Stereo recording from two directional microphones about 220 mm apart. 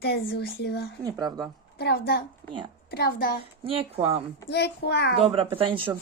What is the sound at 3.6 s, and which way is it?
Speech, 25° right (ahead or behind).